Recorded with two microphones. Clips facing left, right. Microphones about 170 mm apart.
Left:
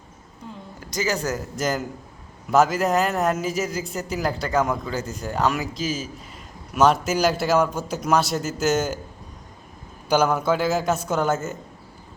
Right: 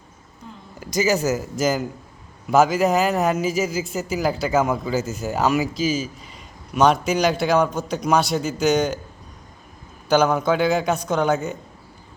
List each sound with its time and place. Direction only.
0.8 s a man's voice: 10° right (ahead or behind)
10.1 s a man's voice: 5° left (ahead or behind)